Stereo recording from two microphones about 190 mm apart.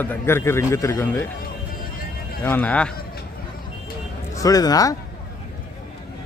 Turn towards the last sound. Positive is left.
turn(degrees=20)  # may be behind; listen again after turning